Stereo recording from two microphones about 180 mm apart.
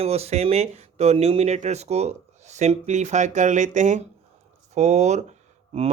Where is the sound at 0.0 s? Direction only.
35° right (ahead or behind).